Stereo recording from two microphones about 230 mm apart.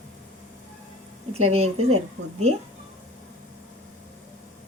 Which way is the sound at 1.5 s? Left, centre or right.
Right.